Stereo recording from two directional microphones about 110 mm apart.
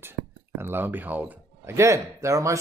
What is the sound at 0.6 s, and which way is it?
Speech, 20° right (ahead or behind).